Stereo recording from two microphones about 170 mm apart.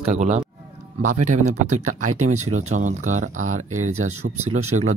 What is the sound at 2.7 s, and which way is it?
Speech, 45° right (ahead or behind).